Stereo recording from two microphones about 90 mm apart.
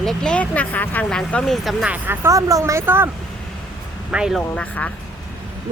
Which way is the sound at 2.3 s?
40° right (ahead or behind).